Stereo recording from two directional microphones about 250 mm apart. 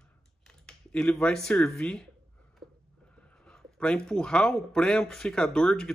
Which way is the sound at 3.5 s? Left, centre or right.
Centre.